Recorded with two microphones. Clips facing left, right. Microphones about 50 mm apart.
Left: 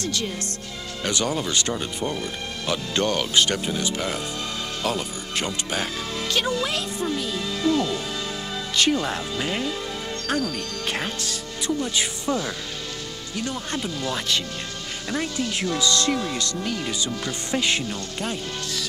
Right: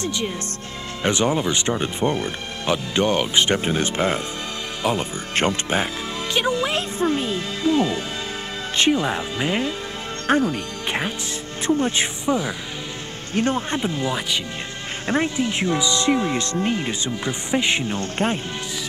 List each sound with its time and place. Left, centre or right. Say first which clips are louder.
0.0 s speech: right 2 dB; right
6.3 s speech: right 4 dB; centre
7.0 s speech: right 5 dB; right
11.6 s speech: right 5 dB; right
12.3 s speech: right 4 dB; centre
13.3 s speech: right 8 dB; right